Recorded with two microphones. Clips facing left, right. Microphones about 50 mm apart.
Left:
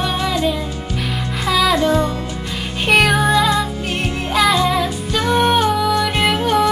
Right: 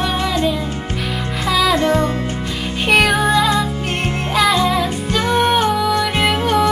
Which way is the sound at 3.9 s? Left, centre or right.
Right.